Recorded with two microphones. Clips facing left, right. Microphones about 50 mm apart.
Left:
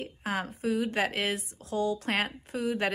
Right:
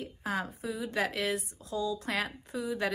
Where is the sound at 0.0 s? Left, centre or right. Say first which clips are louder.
Left 1 dB; left.